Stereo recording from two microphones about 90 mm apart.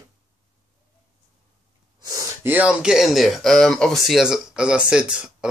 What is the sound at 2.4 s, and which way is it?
Speech, 20° right (ahead or behind).